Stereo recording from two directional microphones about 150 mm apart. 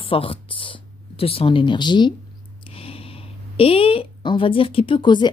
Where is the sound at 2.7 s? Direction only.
40° left (ahead or behind).